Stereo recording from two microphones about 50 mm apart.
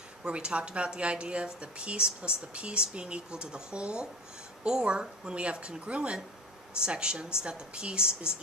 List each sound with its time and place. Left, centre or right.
0.2 s speech: right